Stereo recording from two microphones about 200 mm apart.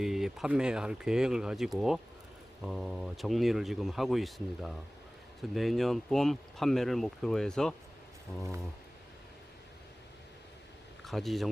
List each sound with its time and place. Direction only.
0.0 s speech: centre (ahead or behind)
11.0 s a man's voice: centre (ahead or behind)